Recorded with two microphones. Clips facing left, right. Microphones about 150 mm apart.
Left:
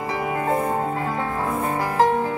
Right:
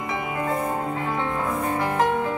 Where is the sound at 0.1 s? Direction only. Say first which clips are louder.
Left 3 dB; 35° left (ahead or behind).